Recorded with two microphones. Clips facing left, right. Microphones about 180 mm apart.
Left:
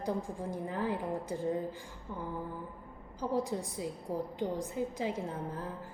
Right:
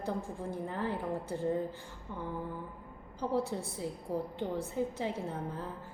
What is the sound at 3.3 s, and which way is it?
A woman's voice, 15° left (ahead or behind).